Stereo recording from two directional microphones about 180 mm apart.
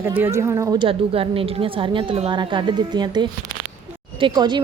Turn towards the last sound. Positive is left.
turn(degrees=-25)  # may be behind; listen again after turning